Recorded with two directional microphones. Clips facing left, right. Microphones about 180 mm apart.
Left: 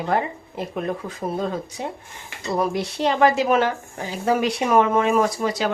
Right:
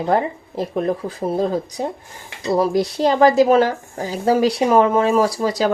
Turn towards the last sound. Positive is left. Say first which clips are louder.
# right 4 dB
turn(degrees=-35)  # may be behind; listen again after turning